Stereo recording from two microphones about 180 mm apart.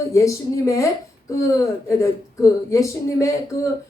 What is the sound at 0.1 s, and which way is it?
Speech, 15° left (ahead or behind).